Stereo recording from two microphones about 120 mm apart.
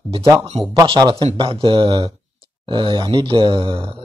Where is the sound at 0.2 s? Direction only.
30° right (ahead or behind).